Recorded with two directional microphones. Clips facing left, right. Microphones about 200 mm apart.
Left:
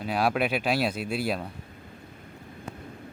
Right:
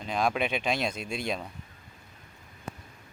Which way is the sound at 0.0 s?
5° left (ahead or behind).